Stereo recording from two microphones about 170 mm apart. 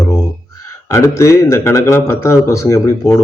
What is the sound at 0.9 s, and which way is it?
Speech, 15° left (ahead or behind).